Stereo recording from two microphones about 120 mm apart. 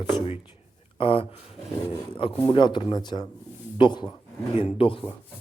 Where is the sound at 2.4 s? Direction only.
45° left (ahead or behind).